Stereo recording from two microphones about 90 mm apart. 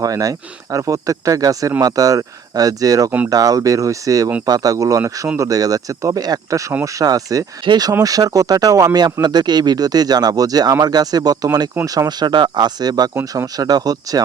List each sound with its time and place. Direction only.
0.0 s speech: 40° right (ahead or behind)
7.6 s speech: 55° right (ahead or behind)
7.9 s speech: 40° right (ahead or behind)